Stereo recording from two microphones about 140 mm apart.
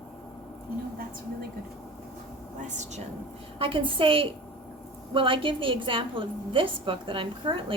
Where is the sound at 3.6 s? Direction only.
35° right (ahead or behind).